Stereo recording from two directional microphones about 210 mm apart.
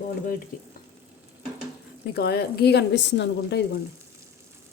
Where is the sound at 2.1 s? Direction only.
50° left (ahead or behind).